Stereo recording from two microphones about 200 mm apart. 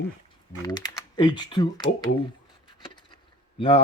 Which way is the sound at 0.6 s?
20° left (ahead or behind).